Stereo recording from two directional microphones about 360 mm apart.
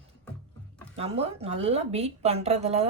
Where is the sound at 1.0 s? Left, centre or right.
Centre.